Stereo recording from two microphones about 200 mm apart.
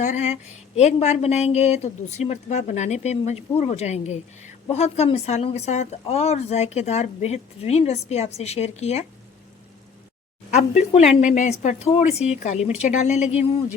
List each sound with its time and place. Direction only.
0.0 s speech: 35° left (ahead or behind)
10.5 s speech: 35° left (ahead or behind)